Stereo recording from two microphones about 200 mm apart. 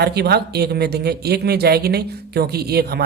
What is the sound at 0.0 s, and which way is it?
Speech, 55° right (ahead or behind).